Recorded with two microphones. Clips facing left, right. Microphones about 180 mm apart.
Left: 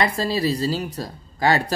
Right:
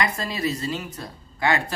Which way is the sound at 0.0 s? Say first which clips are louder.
Left 4 dB; 30° left (ahead or behind).